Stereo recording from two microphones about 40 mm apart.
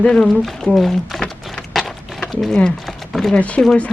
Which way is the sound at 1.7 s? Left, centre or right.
Centre.